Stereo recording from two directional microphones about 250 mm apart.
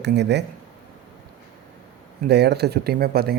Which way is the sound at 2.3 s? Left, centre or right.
Right.